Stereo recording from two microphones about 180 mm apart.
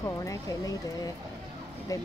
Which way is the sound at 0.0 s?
20° left (ahead or behind).